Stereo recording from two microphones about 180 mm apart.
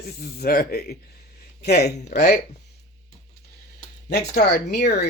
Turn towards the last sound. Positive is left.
turn(degrees=65)  # may be behind; listen again after turning